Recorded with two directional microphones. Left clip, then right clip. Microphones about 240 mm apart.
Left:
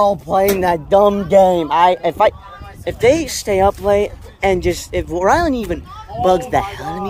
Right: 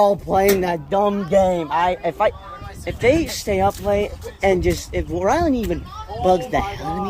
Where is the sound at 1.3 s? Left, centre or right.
Left.